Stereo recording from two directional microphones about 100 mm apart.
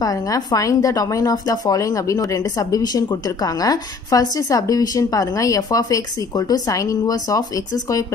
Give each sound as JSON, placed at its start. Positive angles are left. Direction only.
{"t": 0.0, "sound": "a woman's voice", "side_deg": 40}